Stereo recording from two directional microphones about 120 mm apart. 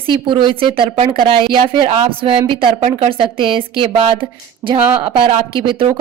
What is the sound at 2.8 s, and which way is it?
Speech, 65° right (ahead or behind).